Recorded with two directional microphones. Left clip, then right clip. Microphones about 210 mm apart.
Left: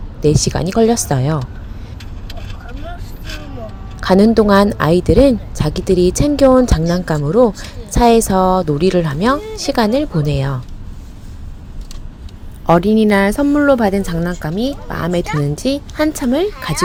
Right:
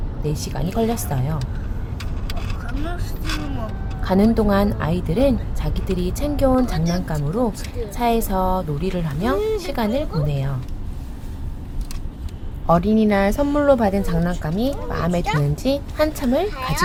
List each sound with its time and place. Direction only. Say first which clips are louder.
0.2 s a woman's voice: left 13 dB; 35° left (ahead or behind)
4.0 s a woman's voice: left 8 dB; 30° left (ahead or behind)
12.6 s a woman's voice: left 6 dB; 25° left (ahead or behind)